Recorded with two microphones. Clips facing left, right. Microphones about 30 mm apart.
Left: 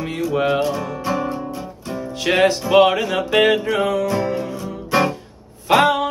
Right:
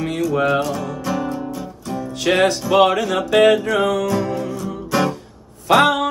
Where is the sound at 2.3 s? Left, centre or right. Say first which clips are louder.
Left 2 dB; centre.